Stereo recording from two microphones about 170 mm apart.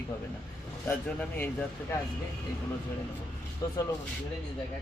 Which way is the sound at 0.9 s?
10° left (ahead or behind).